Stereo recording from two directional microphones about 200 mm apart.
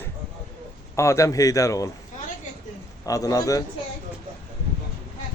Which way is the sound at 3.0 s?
15° left (ahead or behind).